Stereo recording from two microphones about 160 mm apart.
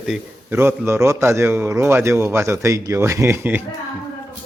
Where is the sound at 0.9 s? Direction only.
20° right (ahead or behind).